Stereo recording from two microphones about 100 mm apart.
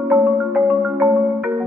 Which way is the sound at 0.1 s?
5° right (ahead or behind).